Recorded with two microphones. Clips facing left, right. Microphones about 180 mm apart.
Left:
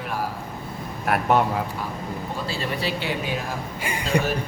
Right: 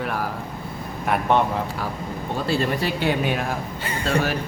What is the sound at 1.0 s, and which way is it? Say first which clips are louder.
Speech: even; 5° left (ahead or behind).